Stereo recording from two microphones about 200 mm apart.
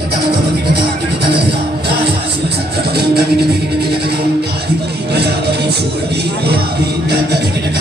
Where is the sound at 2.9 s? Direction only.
55° right (ahead or behind).